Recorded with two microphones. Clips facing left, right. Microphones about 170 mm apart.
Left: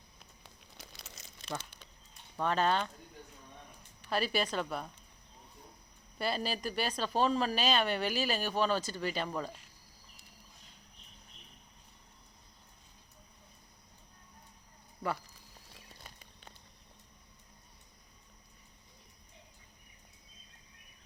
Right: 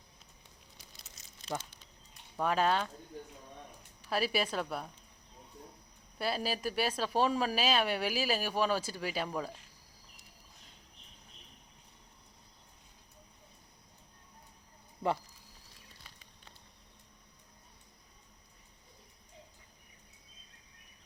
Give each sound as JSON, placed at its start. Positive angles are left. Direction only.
{"t": 0.2, "sound": "a sound", "side_deg": 75}
{"t": 2.3, "sound": "speech", "side_deg": -10}
{"t": 4.1, "sound": "speech", "side_deg": -5}
{"t": 6.1, "sound": "speech", "side_deg": -5}